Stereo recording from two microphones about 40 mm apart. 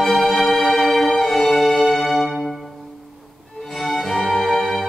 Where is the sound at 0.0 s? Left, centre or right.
Centre.